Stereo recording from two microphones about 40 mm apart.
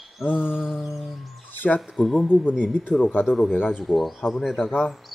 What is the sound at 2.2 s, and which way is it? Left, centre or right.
Speech, left.